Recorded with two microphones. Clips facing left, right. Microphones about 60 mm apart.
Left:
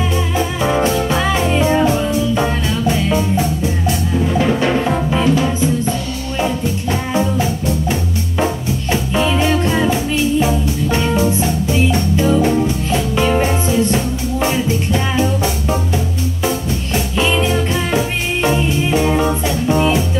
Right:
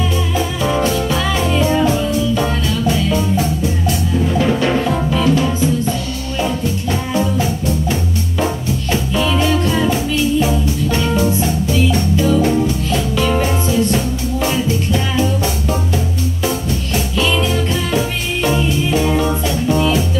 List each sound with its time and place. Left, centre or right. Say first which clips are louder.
0.0 s music: left 1 dB; left
6.9 s music: left 1 dB; left
17.2 s music: left 1 dB; left